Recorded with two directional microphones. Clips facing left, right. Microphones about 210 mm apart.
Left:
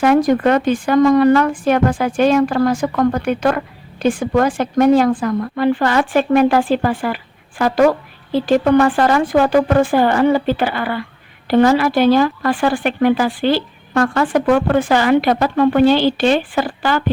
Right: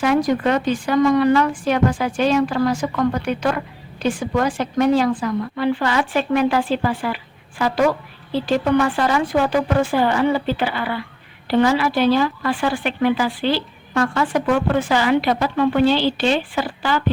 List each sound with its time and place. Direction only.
0.0 s speech: 50° left (ahead or behind)